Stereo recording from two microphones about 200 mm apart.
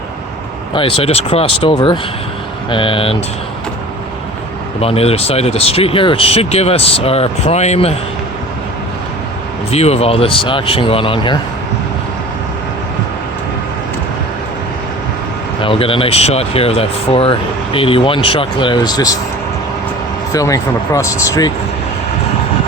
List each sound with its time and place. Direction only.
0.7 s speech: 25° left (ahead or behind)
4.8 s speech: 30° left (ahead or behind)
9.7 s speech: 30° left (ahead or behind)
15.6 s speech: 25° left (ahead or behind)
20.3 s speech: 15° left (ahead or behind)